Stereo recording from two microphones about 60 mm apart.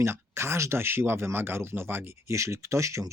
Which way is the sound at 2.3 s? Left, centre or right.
Right.